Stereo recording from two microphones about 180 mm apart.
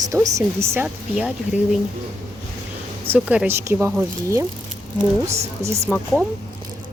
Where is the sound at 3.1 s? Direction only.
10° right (ahead or behind).